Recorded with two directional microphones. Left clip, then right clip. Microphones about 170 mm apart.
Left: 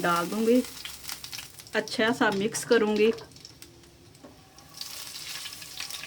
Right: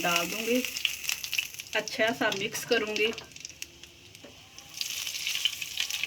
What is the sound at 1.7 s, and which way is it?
Speech, 55° left (ahead or behind).